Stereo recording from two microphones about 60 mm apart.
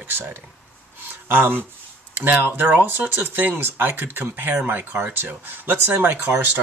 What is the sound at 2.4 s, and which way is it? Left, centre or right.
Speech, right.